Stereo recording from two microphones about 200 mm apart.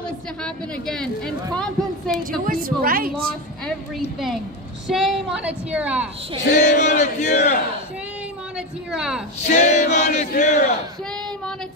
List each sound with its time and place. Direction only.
0.4 s a woman's voice: 5° left (ahead or behind)
2.4 s a woman's voice: 45° right (ahead or behind)
3.6 s a woman's voice: centre (ahead or behind)
6.6 s a sound: 40° left (ahead or behind)
8.5 s a woman's voice: 5° right (ahead or behind)
9.5 s a sound: 35° left (ahead or behind)